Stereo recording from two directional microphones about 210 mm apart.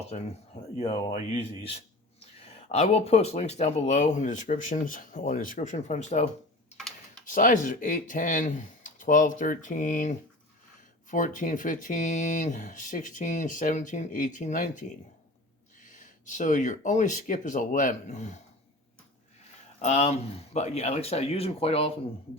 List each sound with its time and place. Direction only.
1.1 s speech: 35° left (ahead or behind)
7.3 s speech: 40° left (ahead or behind)
15.9 s speech: 35° left (ahead or behind)
19.8 s speech: 30° left (ahead or behind)